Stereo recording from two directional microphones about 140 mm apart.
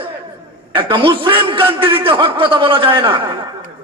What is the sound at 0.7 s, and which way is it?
A man's voice, 35° right (ahead or behind).